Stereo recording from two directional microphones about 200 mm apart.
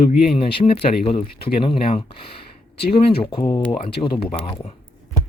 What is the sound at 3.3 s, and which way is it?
Speech, 20° left (ahead or behind).